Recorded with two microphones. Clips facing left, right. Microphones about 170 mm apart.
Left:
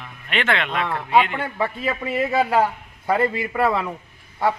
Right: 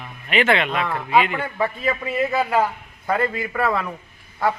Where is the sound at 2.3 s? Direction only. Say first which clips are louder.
Left 3 dB; 25° left (ahead or behind).